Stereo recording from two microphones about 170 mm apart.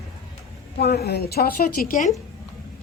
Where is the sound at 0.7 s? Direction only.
70° left (ahead or behind); by 2.1 s 55° left (ahead or behind).